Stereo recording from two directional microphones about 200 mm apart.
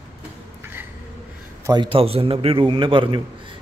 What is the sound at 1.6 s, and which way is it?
A man's voice, 20° right (ahead or behind).